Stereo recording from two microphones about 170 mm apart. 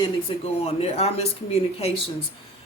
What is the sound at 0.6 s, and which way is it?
Speech, 35° left (ahead or behind).